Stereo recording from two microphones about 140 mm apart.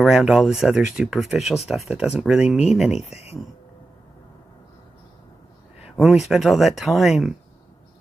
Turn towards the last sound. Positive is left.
turn(degrees=0)  # may be behind; listen again after turning